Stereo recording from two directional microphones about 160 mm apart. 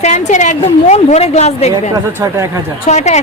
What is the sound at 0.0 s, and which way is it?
A woman's voice, 50° left (ahead or behind).